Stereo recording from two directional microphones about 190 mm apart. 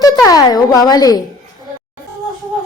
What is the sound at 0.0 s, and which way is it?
Music, 20° left (ahead or behind).